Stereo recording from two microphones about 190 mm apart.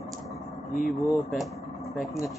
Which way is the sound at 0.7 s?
Centre (ahead or behind).